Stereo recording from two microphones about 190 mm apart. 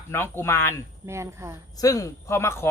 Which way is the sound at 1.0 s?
15° right (ahead or behind).